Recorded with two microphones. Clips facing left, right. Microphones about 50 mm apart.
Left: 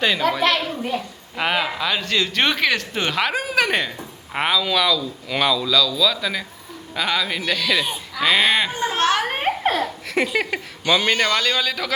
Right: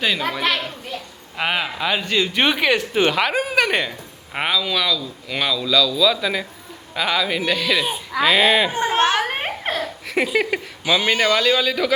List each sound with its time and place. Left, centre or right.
0.0 s a woman's voice: centre
8.7 s a child's voice: right
9.2 s a child's voice: centre